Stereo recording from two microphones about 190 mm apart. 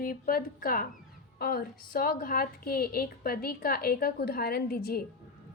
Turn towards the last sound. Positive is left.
turn(degrees=55)  # may be behind; listen again after turning